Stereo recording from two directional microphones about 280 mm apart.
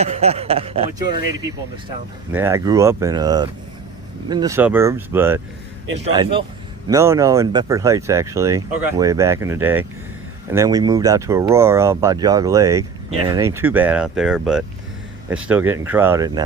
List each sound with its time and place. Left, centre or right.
0.0 s speech: right; by 5.4 s centre
6.1 s speech: centre